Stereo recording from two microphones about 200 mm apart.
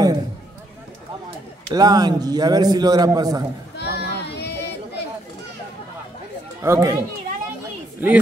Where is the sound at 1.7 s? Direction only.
20° right (ahead or behind).